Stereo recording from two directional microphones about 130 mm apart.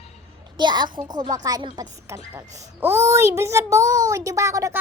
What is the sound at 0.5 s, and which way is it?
A woman's voice, 35° right (ahead or behind).